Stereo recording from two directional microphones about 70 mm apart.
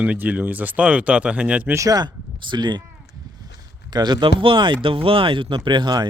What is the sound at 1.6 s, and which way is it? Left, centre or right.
Speech, right.